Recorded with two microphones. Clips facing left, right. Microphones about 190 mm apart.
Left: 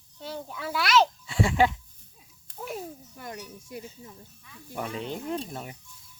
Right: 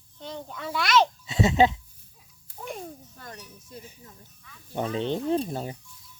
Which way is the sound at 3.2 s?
15° left (ahead or behind).